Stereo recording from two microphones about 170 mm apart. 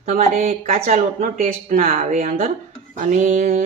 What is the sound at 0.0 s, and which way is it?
A woman's voice, 45° right (ahead or behind).